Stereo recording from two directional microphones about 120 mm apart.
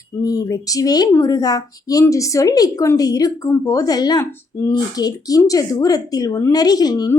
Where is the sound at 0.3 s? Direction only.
30° left (ahead or behind).